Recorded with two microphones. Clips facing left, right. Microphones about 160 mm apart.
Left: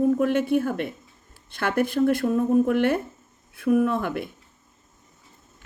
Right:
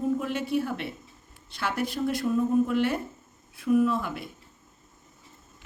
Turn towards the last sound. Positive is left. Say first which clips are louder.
# left 2 dB
turn(degrees=55)  # may be behind; listen again after turning